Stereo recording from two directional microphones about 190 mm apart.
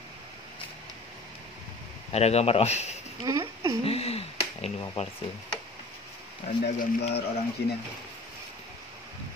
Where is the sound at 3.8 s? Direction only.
30° left (ahead or behind).